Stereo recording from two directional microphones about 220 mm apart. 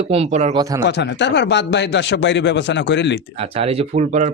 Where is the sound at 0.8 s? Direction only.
50° left (ahead or behind).